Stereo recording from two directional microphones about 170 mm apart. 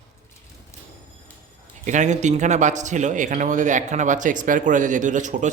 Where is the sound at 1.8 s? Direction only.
45° right (ahead or behind).